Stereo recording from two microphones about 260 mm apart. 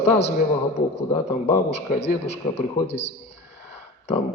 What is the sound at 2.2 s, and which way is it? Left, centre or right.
Speech, left.